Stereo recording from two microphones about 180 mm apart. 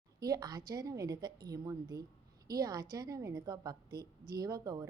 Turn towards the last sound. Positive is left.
turn(degrees=-20)  # may be behind; listen again after turning